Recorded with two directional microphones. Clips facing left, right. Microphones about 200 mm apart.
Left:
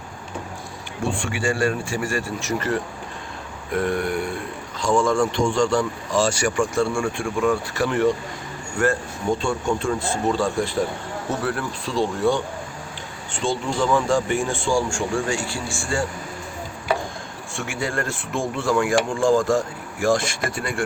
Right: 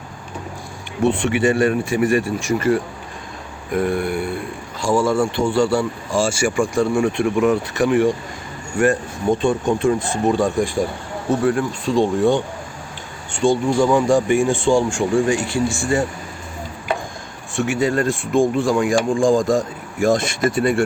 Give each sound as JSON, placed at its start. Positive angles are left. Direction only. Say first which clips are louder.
{"t": 1.1, "sound": "speech", "louder": "right 7 dB", "side_deg": -20}
{"t": 6.9, "sound": "speech", "louder": "right 6 dB", "side_deg": -20}
{"t": 13.4, "sound": "speech", "louder": "right 7 dB", "side_deg": -15}
{"t": 17.5, "sound": "speech", "louder": "right 8 dB", "side_deg": -20}